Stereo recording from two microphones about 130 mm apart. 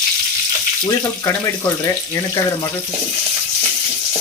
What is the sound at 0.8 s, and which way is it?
Speech, 25° left (ahead or behind).